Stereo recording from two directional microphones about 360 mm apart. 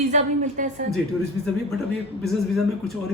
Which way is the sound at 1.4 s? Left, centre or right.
Centre.